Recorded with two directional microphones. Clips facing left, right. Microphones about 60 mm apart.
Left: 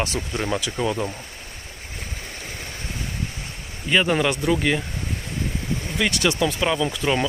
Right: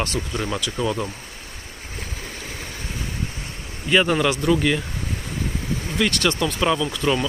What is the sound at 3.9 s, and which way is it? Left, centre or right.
Speech, centre.